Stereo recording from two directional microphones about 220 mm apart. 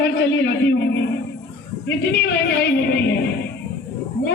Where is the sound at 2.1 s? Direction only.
50° left (ahead or behind).